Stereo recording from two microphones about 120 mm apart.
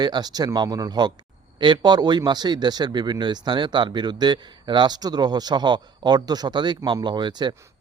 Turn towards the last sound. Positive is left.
turn(degrees=-40)  # may be behind; listen again after turning